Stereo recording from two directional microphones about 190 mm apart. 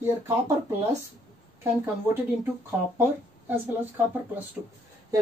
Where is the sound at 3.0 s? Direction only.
10° right (ahead or behind).